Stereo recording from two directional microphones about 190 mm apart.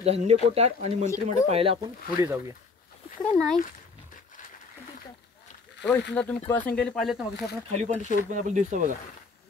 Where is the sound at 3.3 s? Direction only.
5° left (ahead or behind).